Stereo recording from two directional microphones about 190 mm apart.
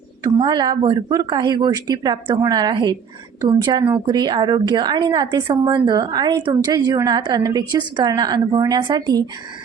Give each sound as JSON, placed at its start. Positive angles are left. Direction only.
{"t": 0.3, "sound": "a woman's voice", "side_deg": -25}